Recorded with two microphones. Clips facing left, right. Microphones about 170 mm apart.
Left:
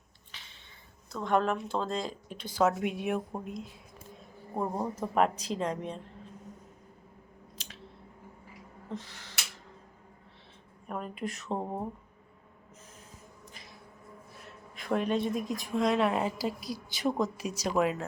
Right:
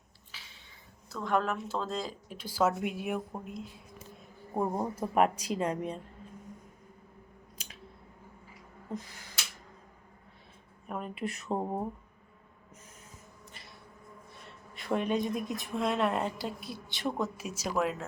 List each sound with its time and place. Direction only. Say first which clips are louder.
0.3 s a sound: even; 5° right (ahead or behind)
1.1 s speech: left 2 dB; 5° right (ahead or behind)
4.5 s a woman's voice: right 1 dB; 10° right (ahead or behind)
10.8 s speech: even; centre (ahead or behind)
13.5 s a sound: left 1 dB; centre (ahead or behind)
15.6 s speech: left 3 dB; 5° right (ahead or behind)
16.6 s a woman's voice: left 4 dB; 40° left (ahead or behind)
16.9 s speech: left 3 dB; centre (ahead or behind)